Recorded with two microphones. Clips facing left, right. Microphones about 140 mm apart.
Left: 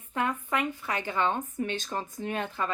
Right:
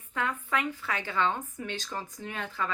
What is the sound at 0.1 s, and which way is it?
A woman's voice, 20° left (ahead or behind).